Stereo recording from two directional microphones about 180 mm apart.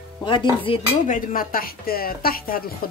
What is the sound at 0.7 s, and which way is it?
Speech, 30° left (ahead or behind).